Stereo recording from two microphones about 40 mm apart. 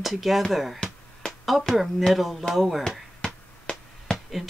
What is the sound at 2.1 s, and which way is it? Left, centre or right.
Speech, centre.